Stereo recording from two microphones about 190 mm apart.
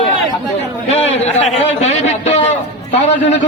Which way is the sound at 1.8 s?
35° left (ahead or behind).